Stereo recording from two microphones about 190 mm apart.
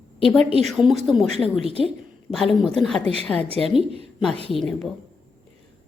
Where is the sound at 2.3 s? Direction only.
Centre (ahead or behind).